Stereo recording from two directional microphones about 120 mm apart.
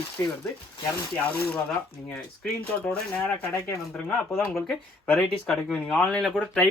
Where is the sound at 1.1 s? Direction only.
15° left (ahead or behind).